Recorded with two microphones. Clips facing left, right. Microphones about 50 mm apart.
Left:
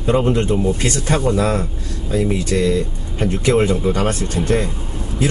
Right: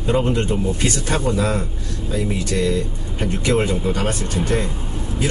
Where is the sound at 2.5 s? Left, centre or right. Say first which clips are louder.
Left 2 dB; left.